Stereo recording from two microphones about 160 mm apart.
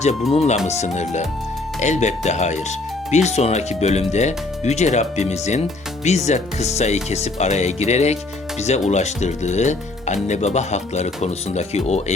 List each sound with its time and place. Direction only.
0.3 s speech: 40° left (ahead or behind)